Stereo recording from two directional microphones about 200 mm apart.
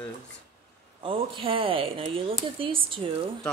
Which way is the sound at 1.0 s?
25° right (ahead or behind).